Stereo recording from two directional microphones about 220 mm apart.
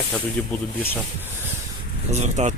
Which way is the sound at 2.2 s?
30° right (ahead or behind).